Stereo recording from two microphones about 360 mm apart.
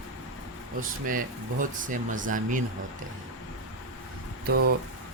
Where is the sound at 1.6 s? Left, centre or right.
Right.